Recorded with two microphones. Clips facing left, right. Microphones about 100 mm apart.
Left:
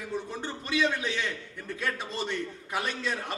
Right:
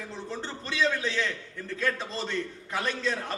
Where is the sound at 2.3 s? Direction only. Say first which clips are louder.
Right 1 dB; 15° left (ahead or behind).